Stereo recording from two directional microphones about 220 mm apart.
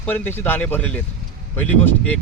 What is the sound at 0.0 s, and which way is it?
Speech, 10° left (ahead or behind).